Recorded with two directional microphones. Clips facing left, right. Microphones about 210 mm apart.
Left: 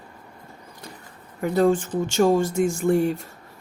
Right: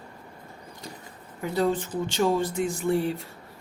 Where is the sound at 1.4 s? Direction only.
50° left (ahead or behind).